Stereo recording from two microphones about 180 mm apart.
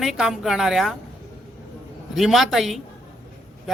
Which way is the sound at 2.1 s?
Centre (ahead or behind).